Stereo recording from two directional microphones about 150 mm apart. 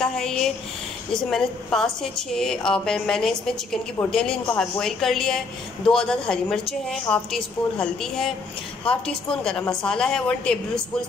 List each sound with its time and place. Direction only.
0.0 s a woman's voice: centre (ahead or behind)